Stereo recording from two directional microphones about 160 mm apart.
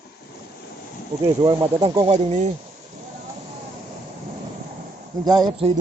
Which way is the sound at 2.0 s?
40° right (ahead or behind).